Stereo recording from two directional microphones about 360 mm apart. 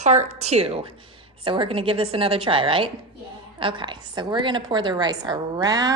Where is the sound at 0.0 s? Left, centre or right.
Centre.